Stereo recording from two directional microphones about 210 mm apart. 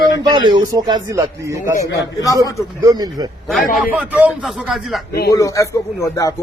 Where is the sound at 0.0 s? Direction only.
20° right (ahead or behind).